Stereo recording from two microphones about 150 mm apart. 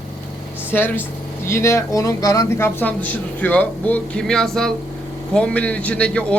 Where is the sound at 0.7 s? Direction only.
15° left (ahead or behind).